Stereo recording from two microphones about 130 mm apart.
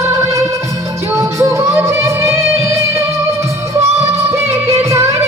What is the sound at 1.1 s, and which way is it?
Music, 20° right (ahead or behind).